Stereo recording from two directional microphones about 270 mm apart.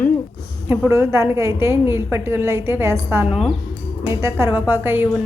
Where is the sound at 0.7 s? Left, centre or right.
Centre.